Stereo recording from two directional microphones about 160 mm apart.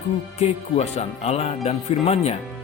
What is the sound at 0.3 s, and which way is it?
Speech, 40° left (ahead or behind).